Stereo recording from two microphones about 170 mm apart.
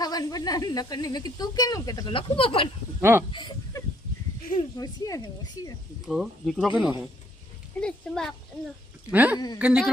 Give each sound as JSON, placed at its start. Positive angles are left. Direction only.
{"t": 0.0, "sound": "a woman's voice", "side_deg": 20}
{"t": 3.0, "sound": "speech", "side_deg": -15}
{"t": 3.3, "sound": "a sound", "side_deg": 25}
{"t": 4.8, "sound": "a woman's voice", "side_deg": 20}
{"t": 6.1, "sound": "speech", "side_deg": 0}
{"t": 9.0, "sound": "speech", "side_deg": -10}